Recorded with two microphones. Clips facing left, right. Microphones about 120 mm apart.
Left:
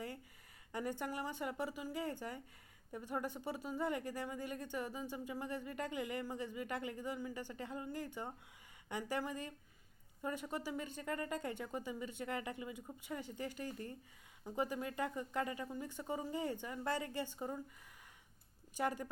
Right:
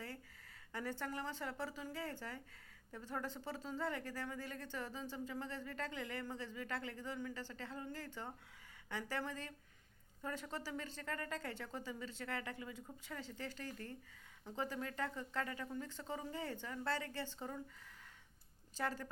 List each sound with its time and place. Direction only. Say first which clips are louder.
0.7 s speech: left 3 dB; 15° left (ahead or behind)
18.7 s speech: left 3 dB; 15° left (ahead or behind)